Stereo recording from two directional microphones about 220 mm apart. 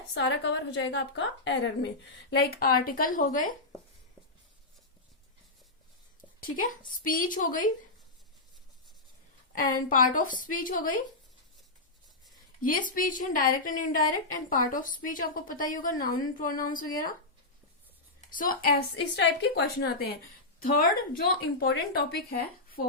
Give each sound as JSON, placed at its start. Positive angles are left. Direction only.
{"t": 0.1, "sound": "a woman's voice", "side_deg": 55}
{"t": 6.4, "sound": "a woman's voice", "side_deg": 40}
{"t": 9.6, "sound": "a woman's voice", "side_deg": 35}
{"t": 12.6, "sound": "a woman's voice", "side_deg": 40}
{"t": 18.3, "sound": "a woman's voice", "side_deg": 40}